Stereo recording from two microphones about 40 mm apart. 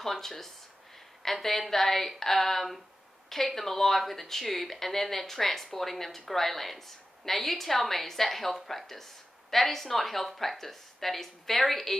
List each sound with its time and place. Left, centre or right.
0.0 s speech: centre